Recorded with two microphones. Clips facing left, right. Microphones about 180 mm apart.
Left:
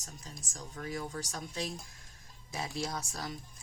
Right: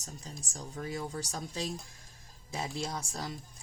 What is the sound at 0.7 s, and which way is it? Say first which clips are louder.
Speech: right 1 dB; 25° right (ahead or behind).